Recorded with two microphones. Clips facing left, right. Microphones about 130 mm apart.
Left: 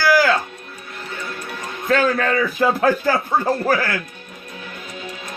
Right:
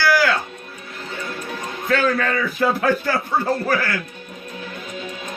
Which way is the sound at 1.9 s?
40° left (ahead or behind).